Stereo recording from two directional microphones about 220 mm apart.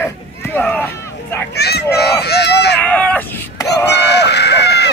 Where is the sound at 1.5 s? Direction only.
50° left (ahead or behind).